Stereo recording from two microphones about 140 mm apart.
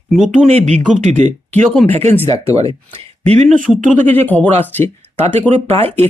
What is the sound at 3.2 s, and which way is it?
Speech, 50° right (ahead or behind).